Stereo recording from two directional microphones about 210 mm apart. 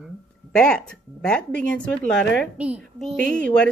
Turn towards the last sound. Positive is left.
turn(degrees=5)  # may be behind; listen again after turning